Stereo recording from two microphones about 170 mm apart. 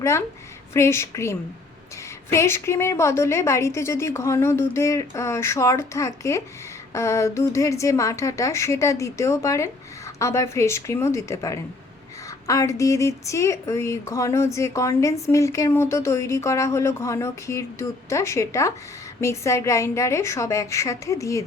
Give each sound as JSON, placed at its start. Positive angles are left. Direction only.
{"t": 0.0, "sound": "a woman's voice", "side_deg": 15}